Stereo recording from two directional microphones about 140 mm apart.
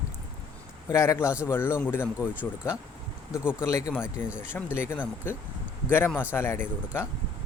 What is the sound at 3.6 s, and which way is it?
Speech, 20° left (ahead or behind).